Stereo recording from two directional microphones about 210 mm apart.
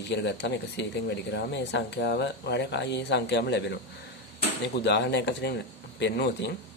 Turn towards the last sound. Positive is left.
turn(degrees=55)  # may be behind; listen again after turning